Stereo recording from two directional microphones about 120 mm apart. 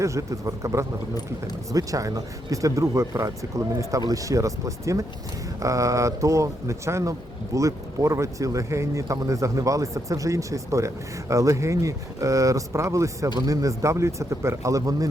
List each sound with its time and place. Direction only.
0.0 s speech: 25° right (ahead or behind)